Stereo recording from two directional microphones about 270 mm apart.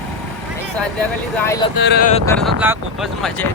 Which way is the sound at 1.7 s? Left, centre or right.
Left.